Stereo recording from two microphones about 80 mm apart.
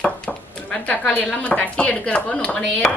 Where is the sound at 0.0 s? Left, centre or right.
Centre.